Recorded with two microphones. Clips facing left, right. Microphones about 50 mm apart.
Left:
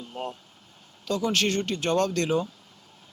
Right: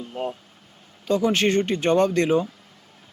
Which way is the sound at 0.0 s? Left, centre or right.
Centre.